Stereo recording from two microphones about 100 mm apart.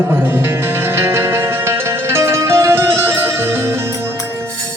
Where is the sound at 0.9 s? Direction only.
25° right (ahead or behind).